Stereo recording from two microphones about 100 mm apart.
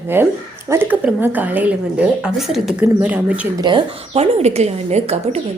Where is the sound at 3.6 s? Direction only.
50° right (ahead or behind).